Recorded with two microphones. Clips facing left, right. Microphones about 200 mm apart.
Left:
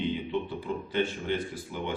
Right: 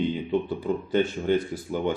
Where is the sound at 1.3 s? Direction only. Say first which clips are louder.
Right 7 dB; 45° right (ahead or behind).